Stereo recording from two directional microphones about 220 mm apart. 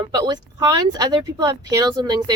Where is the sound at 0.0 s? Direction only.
20° right (ahead or behind).